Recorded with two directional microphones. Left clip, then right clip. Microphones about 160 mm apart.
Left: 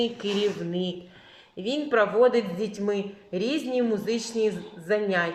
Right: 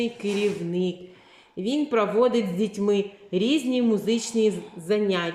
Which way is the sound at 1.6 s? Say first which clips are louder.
Even; 35° right (ahead or behind).